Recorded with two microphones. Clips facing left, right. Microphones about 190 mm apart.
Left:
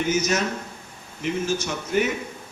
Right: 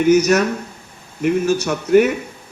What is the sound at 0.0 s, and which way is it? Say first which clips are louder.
A man's voice: right 10 dB; 65° right (ahead or behind).